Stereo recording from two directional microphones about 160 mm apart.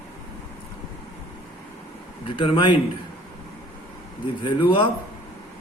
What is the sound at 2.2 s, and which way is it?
Speech, 30° left (ahead or behind).